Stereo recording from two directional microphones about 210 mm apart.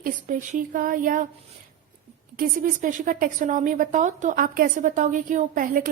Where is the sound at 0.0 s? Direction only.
40° right (ahead or behind).